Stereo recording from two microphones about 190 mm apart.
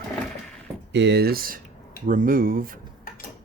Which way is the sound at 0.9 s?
60° right (ahead or behind).